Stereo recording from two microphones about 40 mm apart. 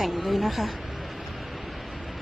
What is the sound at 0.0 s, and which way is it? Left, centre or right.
Speech, centre.